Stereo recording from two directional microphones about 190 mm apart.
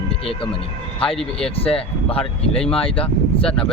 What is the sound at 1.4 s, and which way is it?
Speech, 30° left (ahead or behind).